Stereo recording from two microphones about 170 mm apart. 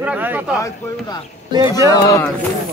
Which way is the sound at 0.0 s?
10° right (ahead or behind).